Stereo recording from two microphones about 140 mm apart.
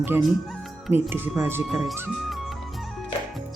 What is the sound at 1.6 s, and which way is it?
Speech, centre (ahead or behind).